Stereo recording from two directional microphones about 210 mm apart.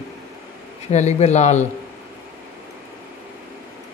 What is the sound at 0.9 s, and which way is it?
Speech, 35° left (ahead or behind).